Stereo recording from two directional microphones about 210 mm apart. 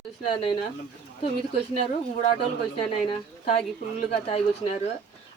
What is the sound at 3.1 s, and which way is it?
A woman's voice, 25° left (ahead or behind).